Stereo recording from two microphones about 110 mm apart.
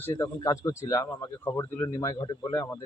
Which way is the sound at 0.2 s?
35° left (ahead or behind).